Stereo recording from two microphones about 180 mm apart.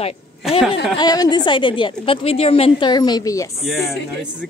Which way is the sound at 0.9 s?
20° left (ahead or behind).